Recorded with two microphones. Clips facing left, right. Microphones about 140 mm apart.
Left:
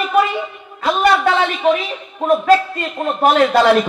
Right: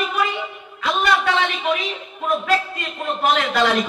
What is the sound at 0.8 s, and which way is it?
A man's voice, 40° left (ahead or behind).